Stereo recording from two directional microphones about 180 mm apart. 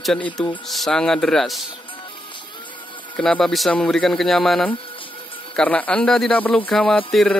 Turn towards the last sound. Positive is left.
turn(degrees=5)  # may be behind; listen again after turning